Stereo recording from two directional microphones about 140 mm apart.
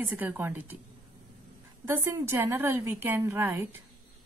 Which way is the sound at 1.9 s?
20° right (ahead or behind).